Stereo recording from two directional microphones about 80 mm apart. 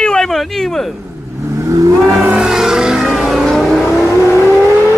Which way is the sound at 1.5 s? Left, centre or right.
Right.